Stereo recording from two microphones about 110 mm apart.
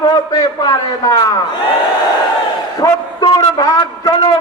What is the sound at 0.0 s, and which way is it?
A man's voice, 40° left (ahead or behind).